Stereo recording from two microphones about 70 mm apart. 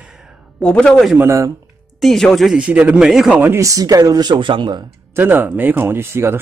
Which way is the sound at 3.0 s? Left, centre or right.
Centre.